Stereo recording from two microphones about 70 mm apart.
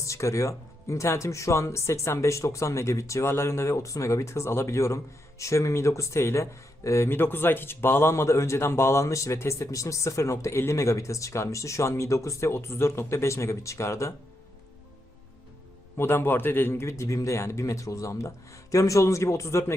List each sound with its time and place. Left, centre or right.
0.0 s speech: left
16.0 s speech: left